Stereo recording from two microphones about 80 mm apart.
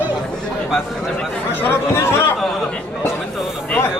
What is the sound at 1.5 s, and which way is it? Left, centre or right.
Speech, left.